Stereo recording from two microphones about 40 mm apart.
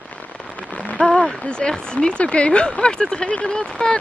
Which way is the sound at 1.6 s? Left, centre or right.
Left.